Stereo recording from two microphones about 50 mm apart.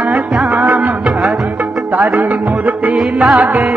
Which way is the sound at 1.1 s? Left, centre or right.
Centre.